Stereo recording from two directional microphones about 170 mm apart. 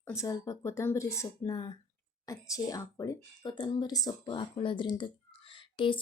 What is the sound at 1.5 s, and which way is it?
Speech, 30° left (ahead or behind).